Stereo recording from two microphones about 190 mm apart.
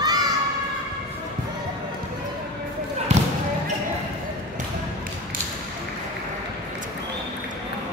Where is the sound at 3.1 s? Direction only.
35° right (ahead or behind).